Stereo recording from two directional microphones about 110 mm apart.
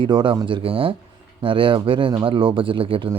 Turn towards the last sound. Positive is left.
turn(degrees=-55)  # may be behind; listen again after turning